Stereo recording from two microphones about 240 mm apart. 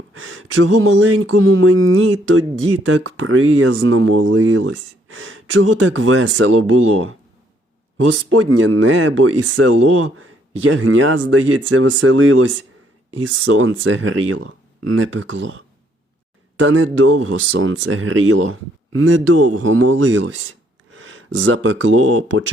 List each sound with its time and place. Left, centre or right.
0.1 s speech: right
8.3 s speech: right
20.9 s speech: right